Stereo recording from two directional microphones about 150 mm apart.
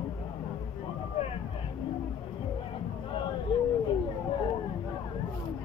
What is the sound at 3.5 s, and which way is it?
Speech, 35° left (ahead or behind).